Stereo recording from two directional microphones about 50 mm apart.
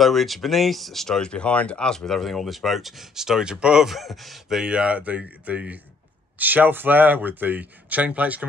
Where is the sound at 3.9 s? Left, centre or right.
Centre.